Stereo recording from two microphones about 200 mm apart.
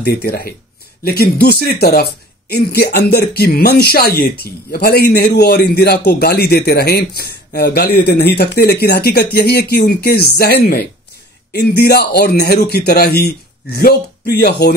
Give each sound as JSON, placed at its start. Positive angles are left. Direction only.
{"t": 0.0, "sound": "speech", "side_deg": 50}